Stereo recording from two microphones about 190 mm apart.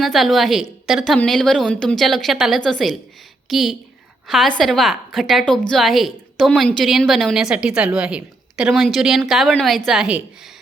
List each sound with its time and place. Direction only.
0.0 s a woman's voice: centre (ahead or behind)